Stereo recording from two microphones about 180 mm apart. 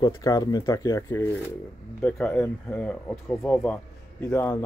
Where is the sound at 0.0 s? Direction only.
20° left (ahead or behind).